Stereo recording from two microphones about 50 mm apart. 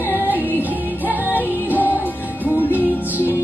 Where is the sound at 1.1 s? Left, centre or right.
Right.